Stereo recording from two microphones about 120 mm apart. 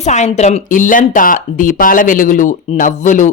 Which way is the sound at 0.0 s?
70° left (ahead or behind).